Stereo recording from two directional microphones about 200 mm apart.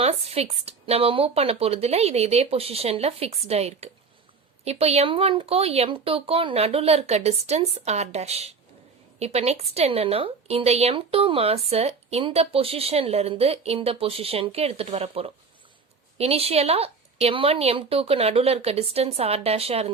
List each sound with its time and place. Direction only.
0.0 s a woman's voice: 30° right (ahead or behind)